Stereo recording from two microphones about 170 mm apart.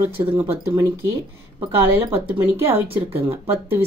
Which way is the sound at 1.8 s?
35° right (ahead or behind).